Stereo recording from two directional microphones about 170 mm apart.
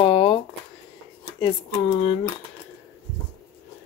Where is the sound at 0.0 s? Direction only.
35° left (ahead or behind).